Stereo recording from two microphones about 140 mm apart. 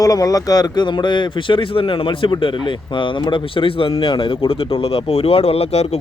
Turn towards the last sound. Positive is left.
turn(degrees=45)  # may be behind; listen again after turning